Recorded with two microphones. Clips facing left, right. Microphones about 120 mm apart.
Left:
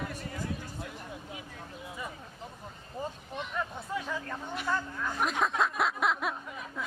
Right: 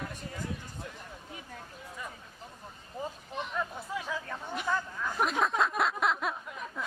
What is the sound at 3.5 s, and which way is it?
Hubbub, centre (ahead or behind).